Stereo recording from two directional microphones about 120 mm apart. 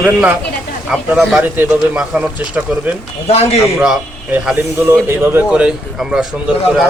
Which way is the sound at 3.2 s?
60° left (ahead or behind).